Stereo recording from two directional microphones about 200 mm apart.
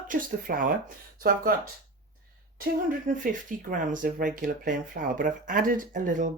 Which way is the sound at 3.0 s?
40° right (ahead or behind).